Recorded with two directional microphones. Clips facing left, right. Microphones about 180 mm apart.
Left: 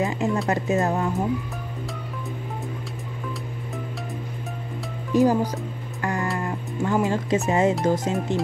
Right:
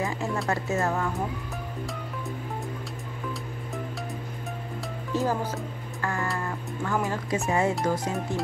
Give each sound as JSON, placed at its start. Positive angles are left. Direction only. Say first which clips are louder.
{"t": 0.0, "sound": "speech", "louder": "left 5 dB", "side_deg": 20}
{"t": 5.1, "sound": "music", "louder": "left 8 dB", "side_deg": 15}
{"t": 7.4, "sound": "speech", "louder": "left 3 dB", "side_deg": 20}